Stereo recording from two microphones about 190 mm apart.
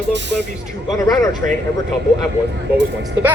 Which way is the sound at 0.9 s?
20° left (ahead or behind).